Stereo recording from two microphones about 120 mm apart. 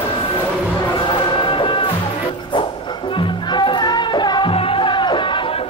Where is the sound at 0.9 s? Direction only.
45° left (ahead or behind).